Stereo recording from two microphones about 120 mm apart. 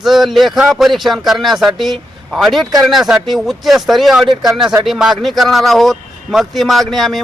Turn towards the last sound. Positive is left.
turn(degrees=0)  # may be behind; listen again after turning